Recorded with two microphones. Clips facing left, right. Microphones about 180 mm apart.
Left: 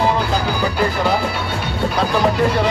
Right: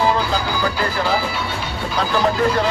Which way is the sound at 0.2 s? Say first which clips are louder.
Left 1 dB; 60° left (ahead or behind).